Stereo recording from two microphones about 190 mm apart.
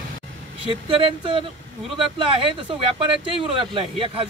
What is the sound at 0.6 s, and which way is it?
Speech, 25° right (ahead or behind).